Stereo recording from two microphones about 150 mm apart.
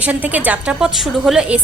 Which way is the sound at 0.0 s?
10° right (ahead or behind).